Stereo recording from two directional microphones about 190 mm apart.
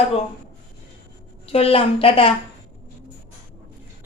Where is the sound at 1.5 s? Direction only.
30° left (ahead or behind).